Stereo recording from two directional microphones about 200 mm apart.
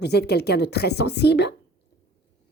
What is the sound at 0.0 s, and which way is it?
A woman's voice, 55° left (ahead or behind).